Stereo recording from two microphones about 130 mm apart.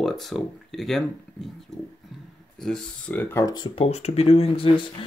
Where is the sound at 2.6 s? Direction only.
5° left (ahead or behind).